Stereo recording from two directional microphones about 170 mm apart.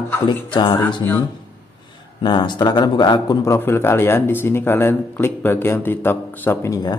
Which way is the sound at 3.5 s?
15° left (ahead or behind).